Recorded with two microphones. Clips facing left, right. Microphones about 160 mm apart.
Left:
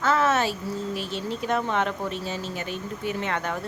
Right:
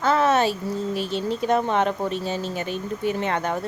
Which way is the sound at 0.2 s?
20° right (ahead or behind).